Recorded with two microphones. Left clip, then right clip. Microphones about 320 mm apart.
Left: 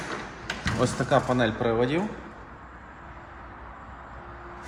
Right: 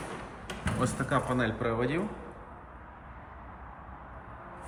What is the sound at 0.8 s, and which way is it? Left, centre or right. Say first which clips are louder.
Speech: left 7 dB; centre.